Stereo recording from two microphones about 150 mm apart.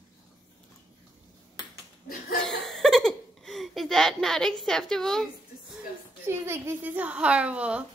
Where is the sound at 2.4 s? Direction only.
5° left (ahead or behind).